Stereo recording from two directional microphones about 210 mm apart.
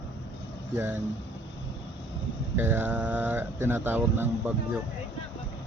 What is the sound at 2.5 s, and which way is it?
Speech, 10° right (ahead or behind).